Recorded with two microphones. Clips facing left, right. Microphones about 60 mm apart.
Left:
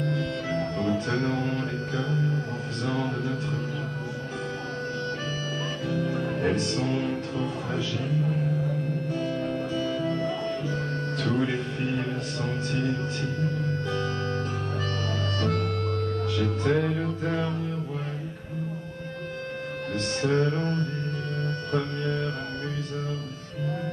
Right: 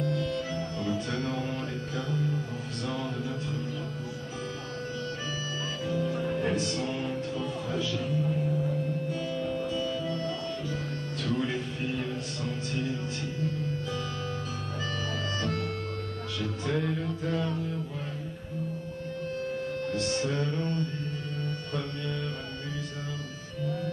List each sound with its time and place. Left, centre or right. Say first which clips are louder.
0.0 s music: left 1 dB; left
5.9 s music: left 1 dB; left
6.2 s music: left 3 dB; left
9.1 s music: left 3 dB; left
11.2 s music: left 3 dB; left
12.7 s speech: left 5 dB; left
16.3 s speech: left 5 dB; left
16.8 s music: left 3 dB; left
19.9 s music: left 5 dB; left